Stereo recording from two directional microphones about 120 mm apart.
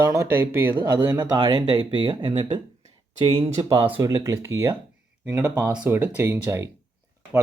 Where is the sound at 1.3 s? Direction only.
45° right (ahead or behind).